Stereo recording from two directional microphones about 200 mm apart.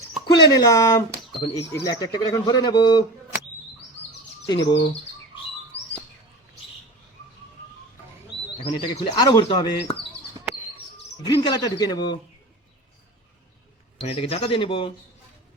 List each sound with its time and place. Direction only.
0.3 s speech: 15° left (ahead or behind)
4.5 s bird: 60° left (ahead or behind)
8.6 s speech: 25° left (ahead or behind)
11.3 s speech: 20° left (ahead or behind)
14.0 s speech: 30° left (ahead or behind)